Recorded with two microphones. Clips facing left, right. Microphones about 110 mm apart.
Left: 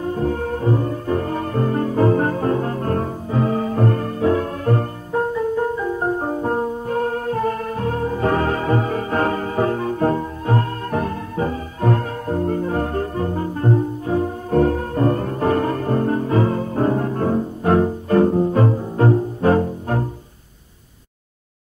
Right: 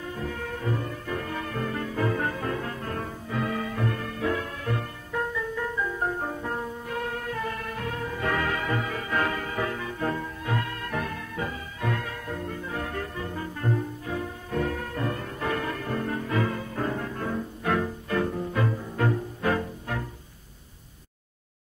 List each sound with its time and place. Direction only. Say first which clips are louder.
0.0 s music: left 12 dB; 40° left (ahead or behind)